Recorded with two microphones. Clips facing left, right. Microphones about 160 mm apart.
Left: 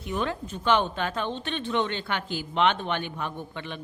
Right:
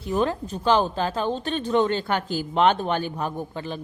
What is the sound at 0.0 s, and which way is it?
A woman's voice, 35° right (ahead or behind).